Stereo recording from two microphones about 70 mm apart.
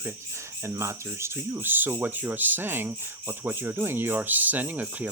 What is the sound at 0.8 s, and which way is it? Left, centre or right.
Speech, right.